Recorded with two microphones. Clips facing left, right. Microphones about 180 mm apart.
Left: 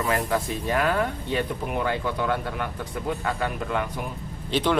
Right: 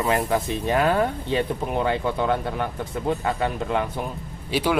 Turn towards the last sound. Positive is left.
turn(degrees=-10)  # may be behind; listen again after turning